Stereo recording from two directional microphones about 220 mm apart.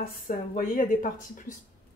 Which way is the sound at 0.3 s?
40° left (ahead or behind).